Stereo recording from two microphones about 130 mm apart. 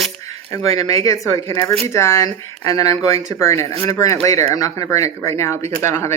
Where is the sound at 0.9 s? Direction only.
25° left (ahead or behind).